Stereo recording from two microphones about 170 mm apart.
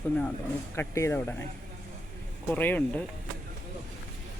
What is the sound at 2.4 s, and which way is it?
Speech, 10° left (ahead or behind).